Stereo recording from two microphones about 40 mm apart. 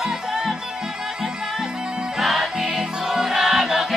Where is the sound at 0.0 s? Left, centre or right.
Centre.